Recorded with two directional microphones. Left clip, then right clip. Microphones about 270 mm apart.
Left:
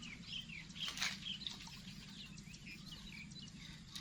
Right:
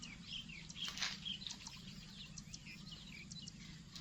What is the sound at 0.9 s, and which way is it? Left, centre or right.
Patter, left.